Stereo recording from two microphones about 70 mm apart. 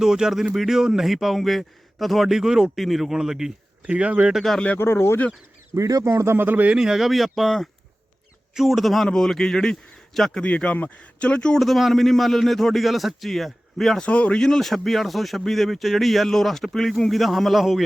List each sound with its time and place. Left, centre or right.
0.0 s speech: centre
3.8 s speech: centre
4.4 s speech: centre
4.8 s speech: left
5.7 s speech: right
6.3 s speech: right
6.7 s speech: centre
10.4 s speech: centre
11.6 s speech: centre
14.0 s speech: centre